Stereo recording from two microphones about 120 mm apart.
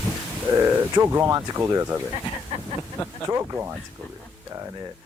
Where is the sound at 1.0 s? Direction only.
20° right (ahead or behind).